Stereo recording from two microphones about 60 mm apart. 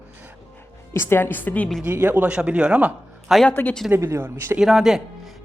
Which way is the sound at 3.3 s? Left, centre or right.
Centre.